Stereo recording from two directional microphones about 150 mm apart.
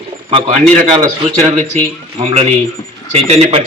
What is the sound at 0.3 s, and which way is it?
Speech, 35° right (ahead or behind).